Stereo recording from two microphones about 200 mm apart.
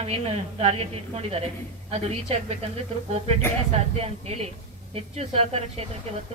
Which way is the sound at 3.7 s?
30° right (ahead or behind).